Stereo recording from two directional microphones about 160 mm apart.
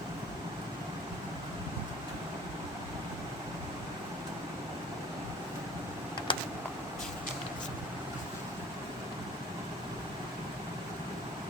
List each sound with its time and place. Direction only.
6.3 s vehicle: 30° left (ahead or behind)